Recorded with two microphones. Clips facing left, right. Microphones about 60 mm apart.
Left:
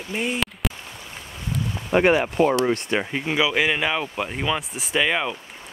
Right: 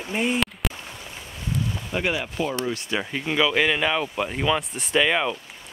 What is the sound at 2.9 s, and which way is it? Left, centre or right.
Speech, centre.